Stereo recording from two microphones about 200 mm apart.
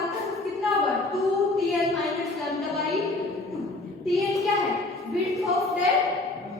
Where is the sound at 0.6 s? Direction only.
Centre (ahead or behind).